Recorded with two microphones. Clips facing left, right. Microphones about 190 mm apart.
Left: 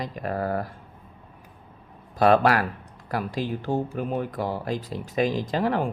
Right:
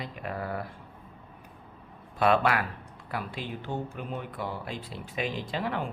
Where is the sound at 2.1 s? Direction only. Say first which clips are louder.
Left 5 dB; 40° left (ahead or behind).